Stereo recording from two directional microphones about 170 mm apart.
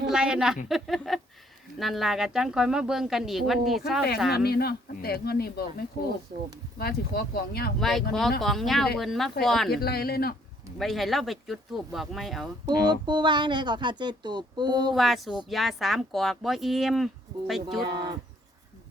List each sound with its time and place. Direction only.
0.1 s speech: 5° right (ahead or behind)
4.3 s speech: 70° left (ahead or behind)
7.8 s speech: centre (ahead or behind)
9.6 s speech: 65° left (ahead or behind)
10.8 s speech: centre (ahead or behind)
12.6 s speech: 25° right (ahead or behind)
14.9 s speech: centre (ahead or behind)